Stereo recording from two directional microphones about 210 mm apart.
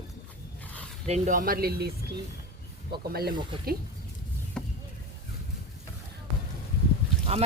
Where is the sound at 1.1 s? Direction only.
40° right (ahead or behind).